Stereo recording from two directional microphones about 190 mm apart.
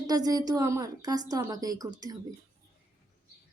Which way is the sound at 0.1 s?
20° right (ahead or behind).